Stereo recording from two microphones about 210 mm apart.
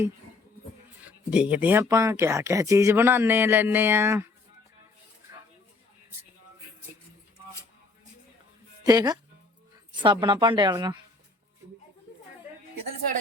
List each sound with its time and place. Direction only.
1.0 s speech: 5° right (ahead or behind)
8.8 s a woman's voice: 20° right (ahead or behind)